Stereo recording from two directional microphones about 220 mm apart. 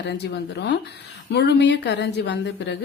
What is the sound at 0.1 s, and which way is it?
A woman's voice, 50° left (ahead or behind).